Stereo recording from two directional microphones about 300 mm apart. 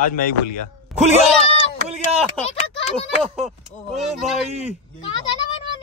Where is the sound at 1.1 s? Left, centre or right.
Left.